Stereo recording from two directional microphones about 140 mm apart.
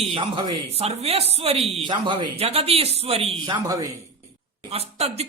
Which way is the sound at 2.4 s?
45° right (ahead or behind).